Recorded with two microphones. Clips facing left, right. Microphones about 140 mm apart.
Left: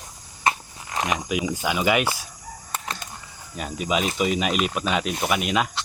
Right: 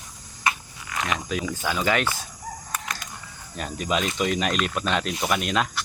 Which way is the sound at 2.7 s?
30° left (ahead or behind).